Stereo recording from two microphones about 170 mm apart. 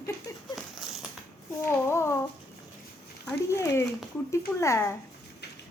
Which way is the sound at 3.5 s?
15° left (ahead or behind).